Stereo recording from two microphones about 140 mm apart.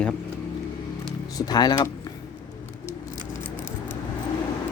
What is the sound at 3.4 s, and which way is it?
Scissors, 15° left (ahead or behind).